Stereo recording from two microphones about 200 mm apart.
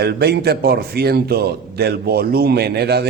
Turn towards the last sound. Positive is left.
turn(degrees=-55)  # may be behind; listen again after turning